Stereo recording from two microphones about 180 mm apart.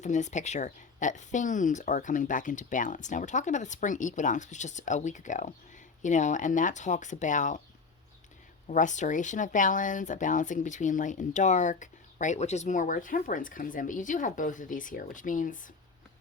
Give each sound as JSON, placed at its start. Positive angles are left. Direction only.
{"t": 0.0, "sound": "speech", "side_deg": 40}
{"t": 8.6, "sound": "speech", "side_deg": 45}